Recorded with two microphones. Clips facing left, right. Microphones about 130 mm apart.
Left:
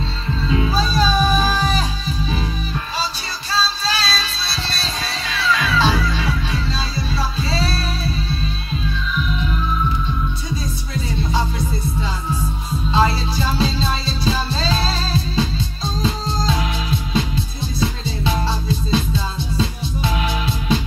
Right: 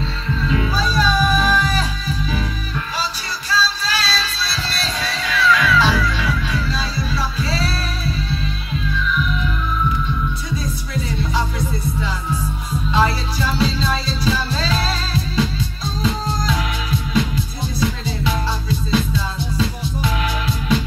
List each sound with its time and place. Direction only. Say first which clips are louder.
0.4 s music: left 1 dB; 25° left (ahead or behind)
3.4 s music: even; 25° left (ahead or behind)
11.3 s music: left 1 dB; 25° left (ahead or behind)
17.7 s music: right 1 dB; 25° left (ahead or behind)